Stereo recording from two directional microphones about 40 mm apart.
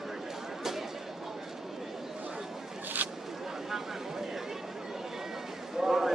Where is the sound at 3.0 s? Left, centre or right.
Right.